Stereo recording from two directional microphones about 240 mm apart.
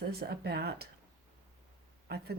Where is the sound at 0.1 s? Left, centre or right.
Right.